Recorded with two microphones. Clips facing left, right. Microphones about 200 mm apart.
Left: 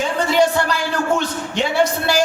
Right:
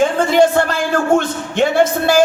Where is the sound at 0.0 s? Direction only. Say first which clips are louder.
Right 5 dB; 50° right (ahead or behind).